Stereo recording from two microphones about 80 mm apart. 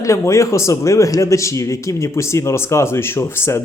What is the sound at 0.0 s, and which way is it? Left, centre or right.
A man's voice, left.